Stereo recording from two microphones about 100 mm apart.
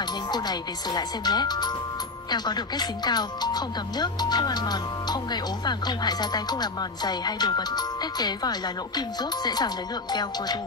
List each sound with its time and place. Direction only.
0.3 s speech: 45° left (ahead or behind)